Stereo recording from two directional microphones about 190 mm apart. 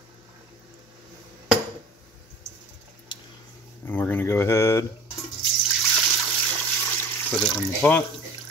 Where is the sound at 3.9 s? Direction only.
10° left (ahead or behind).